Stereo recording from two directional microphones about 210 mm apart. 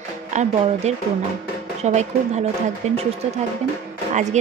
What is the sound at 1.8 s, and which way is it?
Speech, 30° right (ahead or behind).